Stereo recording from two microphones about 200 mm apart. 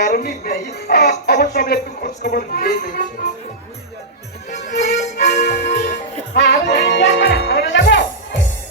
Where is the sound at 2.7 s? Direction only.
40° left (ahead or behind).